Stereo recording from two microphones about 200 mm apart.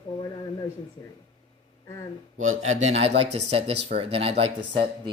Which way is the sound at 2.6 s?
35° right (ahead or behind).